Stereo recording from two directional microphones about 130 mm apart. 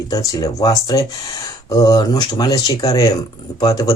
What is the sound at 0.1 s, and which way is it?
Speech, 30° left (ahead or behind).